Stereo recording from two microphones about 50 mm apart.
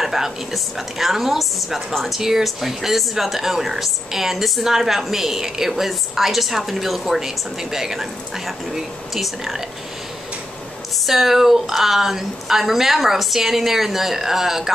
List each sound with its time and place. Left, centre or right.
0.0 s a woman's voice: centre
11.1 s a woman's voice: centre